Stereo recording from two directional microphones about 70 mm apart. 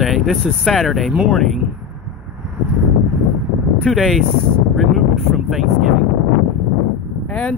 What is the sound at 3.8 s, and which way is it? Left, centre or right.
Speech, centre.